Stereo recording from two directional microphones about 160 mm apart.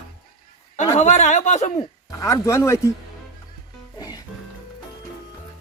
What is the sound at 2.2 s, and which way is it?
Speech, 20° left (ahead or behind).